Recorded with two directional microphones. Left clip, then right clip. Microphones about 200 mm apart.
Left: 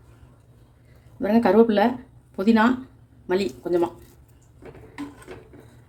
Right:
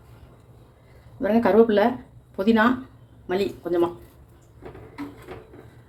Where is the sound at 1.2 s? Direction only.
20° left (ahead or behind).